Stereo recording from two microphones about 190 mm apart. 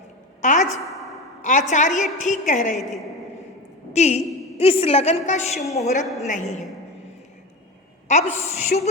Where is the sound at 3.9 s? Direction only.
35° left (ahead or behind).